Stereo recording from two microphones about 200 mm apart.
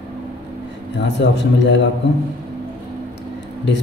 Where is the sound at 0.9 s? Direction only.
60° left (ahead or behind).